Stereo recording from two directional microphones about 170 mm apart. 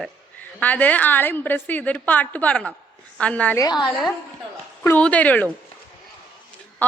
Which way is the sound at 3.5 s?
25° left (ahead or behind).